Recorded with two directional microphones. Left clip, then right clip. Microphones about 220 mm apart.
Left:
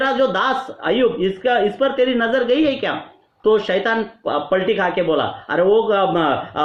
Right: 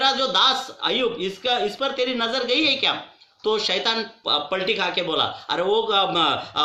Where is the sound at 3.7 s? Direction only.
20° right (ahead or behind).